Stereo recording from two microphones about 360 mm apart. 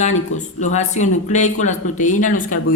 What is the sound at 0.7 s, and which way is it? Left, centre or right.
A woman's voice, centre.